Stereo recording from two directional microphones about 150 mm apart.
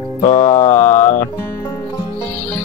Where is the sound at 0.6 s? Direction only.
15° left (ahead or behind).